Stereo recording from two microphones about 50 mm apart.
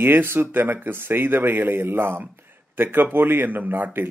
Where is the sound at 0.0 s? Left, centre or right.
Right.